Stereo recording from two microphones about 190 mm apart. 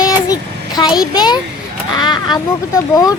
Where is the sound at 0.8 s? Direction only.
20° left (ahead or behind).